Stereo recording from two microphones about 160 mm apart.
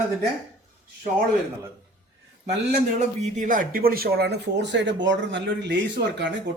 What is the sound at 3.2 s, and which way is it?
Speech, 50° right (ahead or behind).